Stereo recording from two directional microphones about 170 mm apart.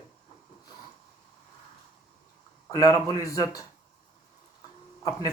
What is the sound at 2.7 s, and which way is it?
Speech, 20° left (ahead or behind).